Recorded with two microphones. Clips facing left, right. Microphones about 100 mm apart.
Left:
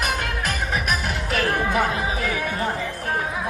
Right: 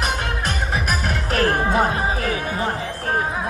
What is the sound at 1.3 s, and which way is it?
Music, 40° right (ahead or behind).